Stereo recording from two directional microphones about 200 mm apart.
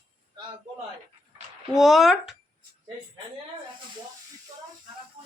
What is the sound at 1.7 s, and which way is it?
Speech, centre (ahead or behind).